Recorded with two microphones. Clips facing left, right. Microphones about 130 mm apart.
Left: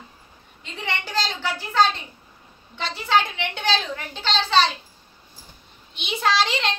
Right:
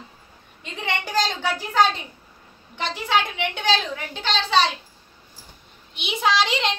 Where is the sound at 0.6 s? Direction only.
15° right (ahead or behind).